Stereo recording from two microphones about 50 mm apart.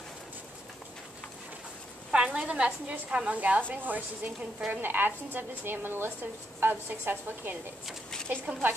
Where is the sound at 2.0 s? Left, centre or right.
Right.